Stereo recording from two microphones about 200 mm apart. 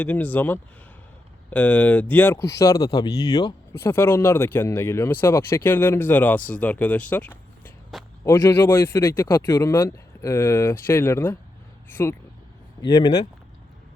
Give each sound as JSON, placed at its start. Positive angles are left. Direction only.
{"t": 0.0, "sound": "speech", "side_deg": 10}